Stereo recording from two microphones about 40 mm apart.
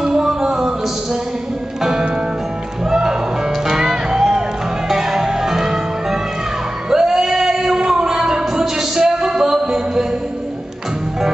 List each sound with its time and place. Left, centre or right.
0.0 s music: centre
1.8 s music: centre